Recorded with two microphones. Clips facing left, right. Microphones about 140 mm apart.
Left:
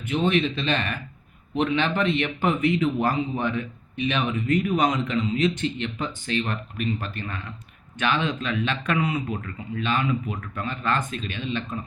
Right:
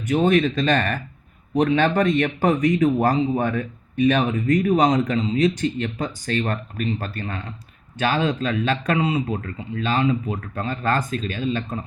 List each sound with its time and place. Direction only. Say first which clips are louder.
0.0 s speech: right 5 dB; 40° right (ahead or behind)